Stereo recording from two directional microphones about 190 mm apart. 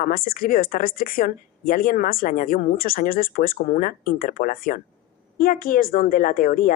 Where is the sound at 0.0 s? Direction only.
50° left (ahead or behind).